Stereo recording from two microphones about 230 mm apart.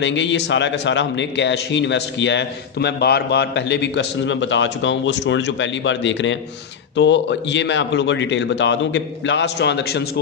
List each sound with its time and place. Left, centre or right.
0.0 s a man's voice: left